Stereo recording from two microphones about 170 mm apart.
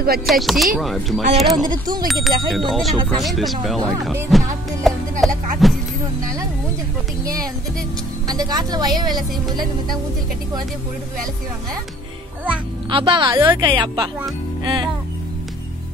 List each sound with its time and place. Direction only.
0.3 s speech: centre (ahead or behind)
1.7 s a woman's voice: 25° right (ahead or behind)
2.2 s speech: centre (ahead or behind)
4.9 s music: centre (ahead or behind)
5.6 s speech: centre (ahead or behind)
8.3 s a woman's voice: 25° right (ahead or behind)
12.9 s a woman's voice: 30° right (ahead or behind)
14.6 s music: 25° right (ahead or behind)